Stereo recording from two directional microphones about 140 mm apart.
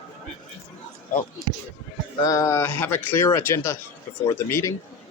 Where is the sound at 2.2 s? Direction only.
20° left (ahead or behind).